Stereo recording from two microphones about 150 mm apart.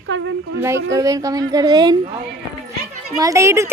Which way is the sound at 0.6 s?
20° right (ahead or behind).